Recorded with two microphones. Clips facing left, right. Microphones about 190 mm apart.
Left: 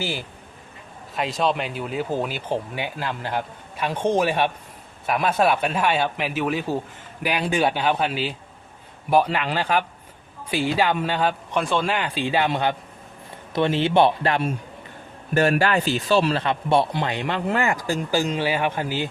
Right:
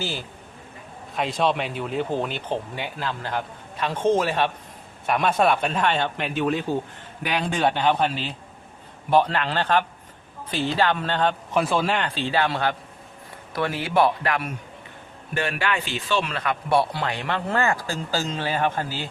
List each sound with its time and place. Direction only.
0.0 s speech: 15° left (ahead or behind)
1.1 s speech: centre (ahead or behind)
5.0 s speech: 5° left (ahead or behind)
12.0 s speech: 15° left (ahead or behind); by 14.5 s 30° left (ahead or behind)
15.4 s speech: 40° left (ahead or behind); by 19.0 s 15° left (ahead or behind)